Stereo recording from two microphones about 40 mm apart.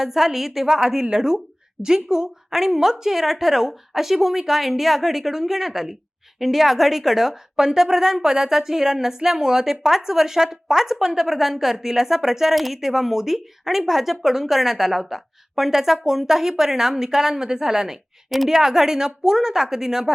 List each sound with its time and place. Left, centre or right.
0.0 s a woman's voice: centre
18.3 s a woman's voice: centre
18.5 s a woman's voice: centre